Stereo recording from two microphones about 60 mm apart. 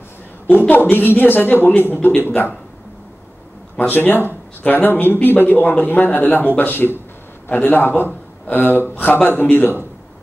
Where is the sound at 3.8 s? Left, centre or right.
Left.